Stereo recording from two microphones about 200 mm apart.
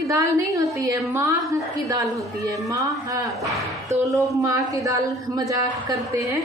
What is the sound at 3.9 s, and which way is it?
Speech, 35° right (ahead or behind).